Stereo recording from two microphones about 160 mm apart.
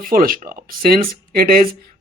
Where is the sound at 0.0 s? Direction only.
60° right (ahead or behind).